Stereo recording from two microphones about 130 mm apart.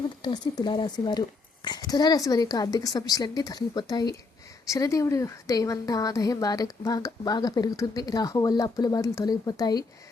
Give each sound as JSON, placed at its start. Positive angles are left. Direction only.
{"t": 0.2, "sound": "a woman's voice", "side_deg": 35}